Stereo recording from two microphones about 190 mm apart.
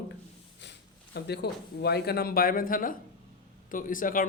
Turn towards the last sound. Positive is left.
turn(degrees=45)  # may be behind; listen again after turning